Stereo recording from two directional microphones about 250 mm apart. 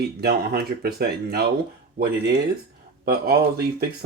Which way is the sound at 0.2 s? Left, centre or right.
Right.